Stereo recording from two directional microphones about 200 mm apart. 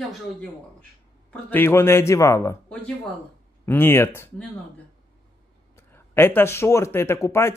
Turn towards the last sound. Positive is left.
turn(degrees=15)  # may be behind; listen again after turning